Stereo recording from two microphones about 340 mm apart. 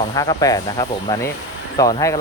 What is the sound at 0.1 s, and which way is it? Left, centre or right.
Speech, centre.